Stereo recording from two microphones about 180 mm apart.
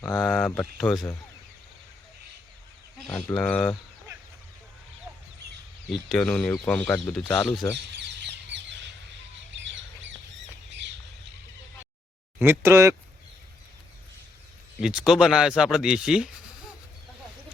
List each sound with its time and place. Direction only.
0.3 s speech: 5° left (ahead or behind)
3.3 s speech: 5° left (ahead or behind)
5.9 s speech: centre (ahead or behind)
7.8 s bird: 75° right (ahead or behind)
9.5 s bird: 90° right
12.4 s speech: 15° right (ahead or behind)
14.8 s speech: 5° right (ahead or behind)